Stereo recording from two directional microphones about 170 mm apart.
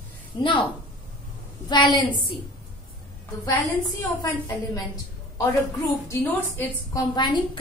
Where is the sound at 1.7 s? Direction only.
25° left (ahead or behind).